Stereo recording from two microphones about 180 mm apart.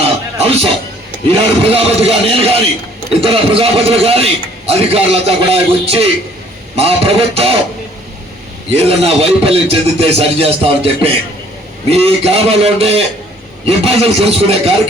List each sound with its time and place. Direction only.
0.0 s music: 35° right (ahead or behind)
1.3 s a man's voice: 35° right (ahead or behind)
8.7 s a man's voice: 35° right (ahead or behind)